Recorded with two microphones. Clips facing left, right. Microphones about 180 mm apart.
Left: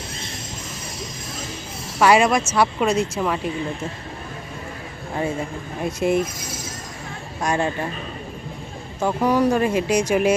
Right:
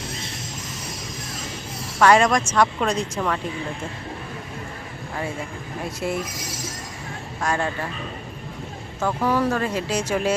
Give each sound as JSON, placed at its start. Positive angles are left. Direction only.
{"t": 2.0, "sound": "speech", "side_deg": 10}
{"t": 6.0, "sound": "a man's voice", "side_deg": 20}
{"t": 7.4, "sound": "a man's voice", "side_deg": 20}
{"t": 9.0, "sound": "speech", "side_deg": 15}